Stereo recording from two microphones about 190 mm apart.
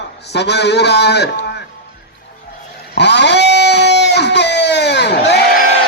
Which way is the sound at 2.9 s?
60° left (ahead or behind).